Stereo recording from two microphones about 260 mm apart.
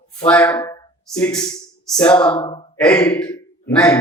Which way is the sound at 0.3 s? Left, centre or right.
Centre.